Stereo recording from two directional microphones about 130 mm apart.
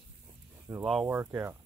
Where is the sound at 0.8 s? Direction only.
5° right (ahead or behind).